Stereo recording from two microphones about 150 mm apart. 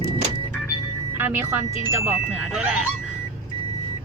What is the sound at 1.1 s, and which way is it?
A woman's voice, 15° right (ahead or behind).